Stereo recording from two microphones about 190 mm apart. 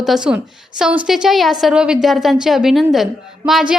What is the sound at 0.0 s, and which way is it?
A woman's voice, 5° right (ahead or behind).